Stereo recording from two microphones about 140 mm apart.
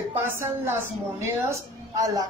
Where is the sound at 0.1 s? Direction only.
15° right (ahead or behind).